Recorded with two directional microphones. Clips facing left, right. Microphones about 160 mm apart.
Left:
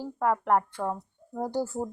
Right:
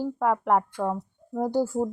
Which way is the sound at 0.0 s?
15° right (ahead or behind).